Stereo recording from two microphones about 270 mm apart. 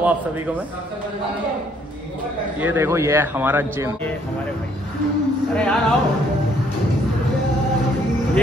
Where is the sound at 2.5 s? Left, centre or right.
Centre.